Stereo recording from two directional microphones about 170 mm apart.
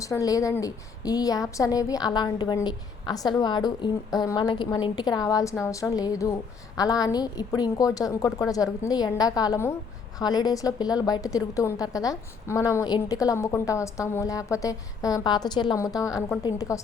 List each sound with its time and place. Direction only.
0.0 s a woman's voice: 20° left (ahead or behind)